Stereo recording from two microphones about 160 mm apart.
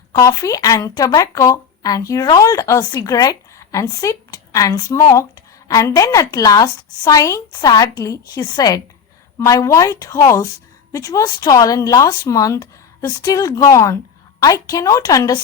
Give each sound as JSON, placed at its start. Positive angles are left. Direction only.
{"t": 0.1, "sound": "speech", "side_deg": 20}